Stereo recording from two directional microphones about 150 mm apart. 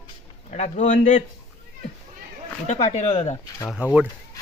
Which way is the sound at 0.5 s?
50° left (ahead or behind).